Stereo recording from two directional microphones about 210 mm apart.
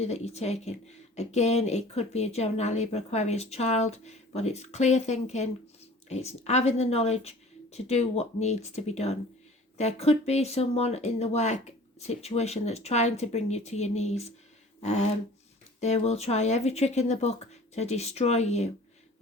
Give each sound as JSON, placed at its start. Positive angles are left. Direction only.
{"t": 0.0, "sound": "speech", "side_deg": 30}
{"t": 14.8, "sound": "a sound", "side_deg": 30}
{"t": 15.8, "sound": "speech", "side_deg": 30}